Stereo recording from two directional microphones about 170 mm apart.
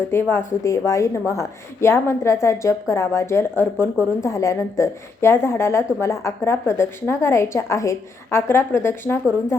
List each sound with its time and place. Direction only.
0.1 s a woman's voice: 15° left (ahead or behind)